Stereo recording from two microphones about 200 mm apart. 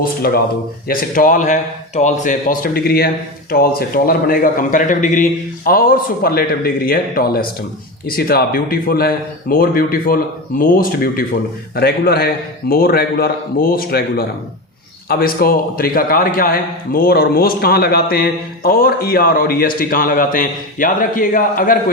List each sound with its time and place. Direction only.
0.9 s a man's voice: 45° left (ahead or behind)